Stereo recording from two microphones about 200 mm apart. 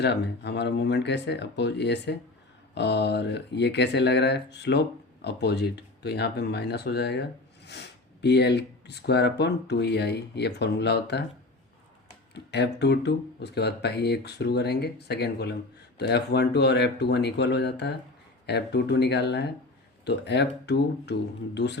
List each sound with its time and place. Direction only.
0.0 s speech: 60° left (ahead or behind)
12.3 s speech: 60° left (ahead or behind)